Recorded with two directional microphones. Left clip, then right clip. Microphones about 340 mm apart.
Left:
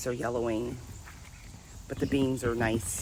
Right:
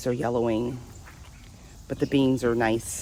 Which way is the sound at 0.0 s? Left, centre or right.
Right.